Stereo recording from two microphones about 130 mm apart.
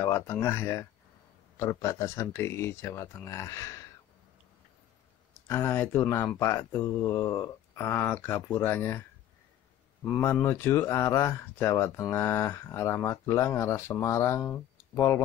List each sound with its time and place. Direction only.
0.0 s speech: 20° left (ahead or behind)
5.5 s speech: 20° left (ahead or behind)
10.0 s speech: 15° left (ahead or behind)